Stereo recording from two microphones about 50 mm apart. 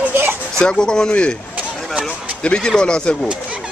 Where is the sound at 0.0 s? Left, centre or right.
Right.